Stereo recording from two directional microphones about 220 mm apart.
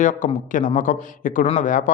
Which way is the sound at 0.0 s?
35° left (ahead or behind).